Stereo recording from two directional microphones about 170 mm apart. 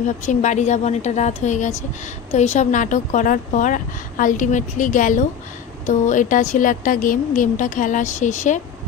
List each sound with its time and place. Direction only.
0.2 s speech: 45° left (ahead or behind)